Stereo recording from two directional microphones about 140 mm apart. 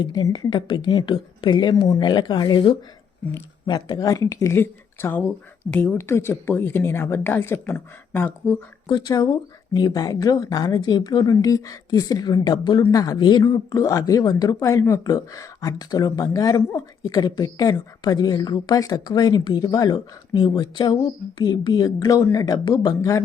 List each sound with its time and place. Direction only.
0.0 s a woman's voice: 30° left (ahead or behind)
8.9 s a woman's voice: 25° left (ahead or behind)